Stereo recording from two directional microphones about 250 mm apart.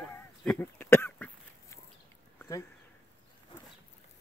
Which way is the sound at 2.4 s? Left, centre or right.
Centre.